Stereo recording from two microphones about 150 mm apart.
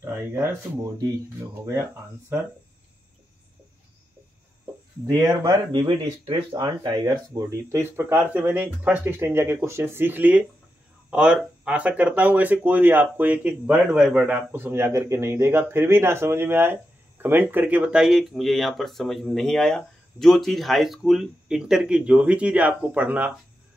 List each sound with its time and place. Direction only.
0.0 s speech: 15° right (ahead or behind)
5.0 s speech: 20° right (ahead or behind)